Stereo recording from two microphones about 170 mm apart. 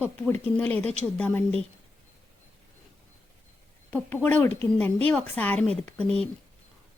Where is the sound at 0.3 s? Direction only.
10° left (ahead or behind).